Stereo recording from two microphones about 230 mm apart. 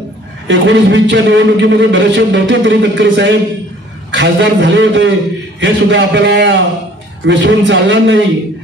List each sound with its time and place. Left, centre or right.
0.5 s a man's voice: right